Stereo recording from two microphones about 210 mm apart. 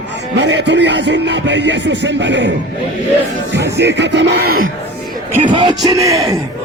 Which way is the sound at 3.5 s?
55° right (ahead or behind).